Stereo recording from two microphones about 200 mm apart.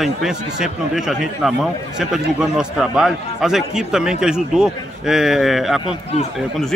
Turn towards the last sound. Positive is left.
turn(degrees=0)  # may be behind; listen again after turning